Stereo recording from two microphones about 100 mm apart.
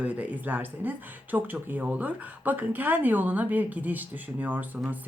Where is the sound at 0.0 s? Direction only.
15° right (ahead or behind).